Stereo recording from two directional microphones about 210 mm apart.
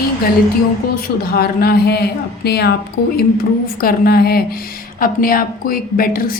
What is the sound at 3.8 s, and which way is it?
Speech, 45° left (ahead or behind).